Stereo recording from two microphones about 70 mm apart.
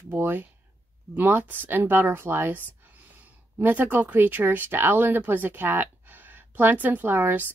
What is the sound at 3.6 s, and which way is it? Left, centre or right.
Speech, right.